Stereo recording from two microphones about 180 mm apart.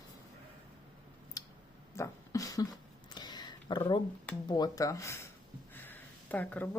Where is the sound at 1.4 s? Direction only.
20° left (ahead or behind).